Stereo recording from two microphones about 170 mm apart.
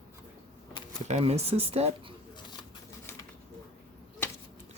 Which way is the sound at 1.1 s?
35° right (ahead or behind).